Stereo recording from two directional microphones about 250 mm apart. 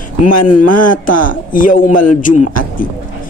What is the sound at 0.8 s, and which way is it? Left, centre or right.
Speech, left.